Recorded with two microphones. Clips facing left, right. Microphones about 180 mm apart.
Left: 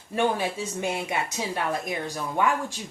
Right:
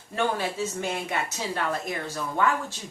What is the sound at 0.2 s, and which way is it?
A woman's voice, 15° left (ahead or behind).